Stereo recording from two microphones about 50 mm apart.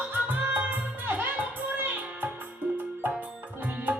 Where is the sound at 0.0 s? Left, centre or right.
Right.